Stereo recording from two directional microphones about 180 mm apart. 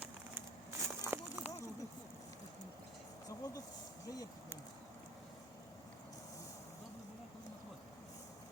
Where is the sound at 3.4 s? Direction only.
20° left (ahead or behind).